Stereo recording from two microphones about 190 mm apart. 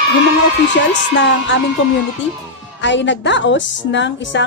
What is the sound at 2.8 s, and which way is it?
Speech, 70° left (ahead or behind).